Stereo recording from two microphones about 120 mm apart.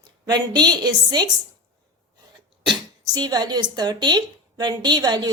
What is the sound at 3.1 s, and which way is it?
A woman's voice, 35° right (ahead or behind).